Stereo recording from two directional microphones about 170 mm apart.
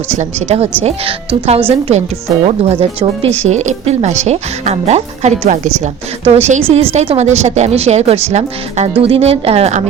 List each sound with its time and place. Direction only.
0.1 s a woman's voice: 40° right (ahead or behind)